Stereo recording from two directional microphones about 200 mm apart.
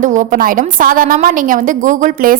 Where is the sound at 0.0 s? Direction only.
40° right (ahead or behind).